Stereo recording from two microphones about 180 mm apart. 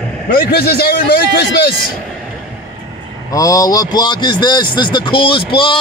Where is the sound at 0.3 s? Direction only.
65° left (ahead or behind).